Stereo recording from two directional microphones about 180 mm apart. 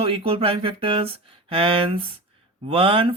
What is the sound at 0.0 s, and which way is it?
Speech, 30° right (ahead or behind).